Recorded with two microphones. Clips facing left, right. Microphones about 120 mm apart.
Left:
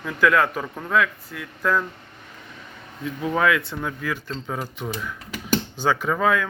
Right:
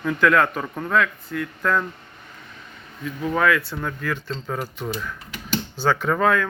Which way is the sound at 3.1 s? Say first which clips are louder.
Right 1 dB; 20° left (ahead or behind).